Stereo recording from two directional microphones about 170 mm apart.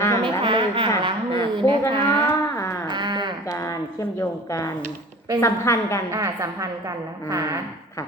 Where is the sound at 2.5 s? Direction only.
15° left (ahead or behind).